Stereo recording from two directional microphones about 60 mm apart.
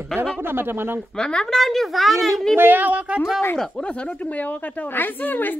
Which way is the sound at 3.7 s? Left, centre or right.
Centre.